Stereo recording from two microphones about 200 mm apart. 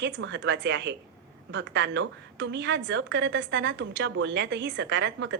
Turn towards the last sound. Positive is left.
turn(degrees=-60)  # may be behind; listen again after turning